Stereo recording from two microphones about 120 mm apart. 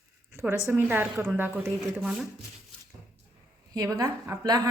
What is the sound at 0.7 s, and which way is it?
Speech, 20° right (ahead or behind).